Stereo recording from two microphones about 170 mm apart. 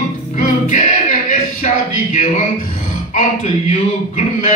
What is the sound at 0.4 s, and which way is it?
Music, 45° left (ahead or behind).